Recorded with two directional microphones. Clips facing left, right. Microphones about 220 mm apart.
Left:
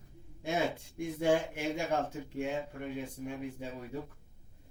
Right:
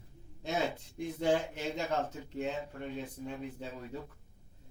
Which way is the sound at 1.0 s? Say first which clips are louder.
Left 1 dB; 15° left (ahead or behind).